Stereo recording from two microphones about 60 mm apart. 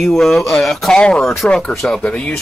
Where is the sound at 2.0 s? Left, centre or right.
Left.